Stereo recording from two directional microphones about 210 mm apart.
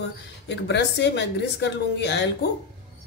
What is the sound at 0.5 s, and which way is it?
A woman's voice, 55° left (ahead or behind).